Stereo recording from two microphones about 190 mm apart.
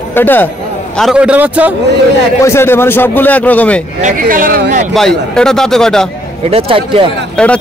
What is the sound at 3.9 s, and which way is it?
Speech, 45° right (ahead or behind).